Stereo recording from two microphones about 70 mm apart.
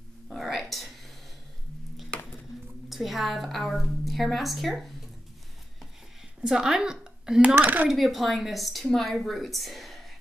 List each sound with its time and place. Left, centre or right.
0.3 s a sound: centre
2.9 s a woman's voice: centre
6.4 s speech: centre
7.5 s speech: right
7.9 s a woman's voice: centre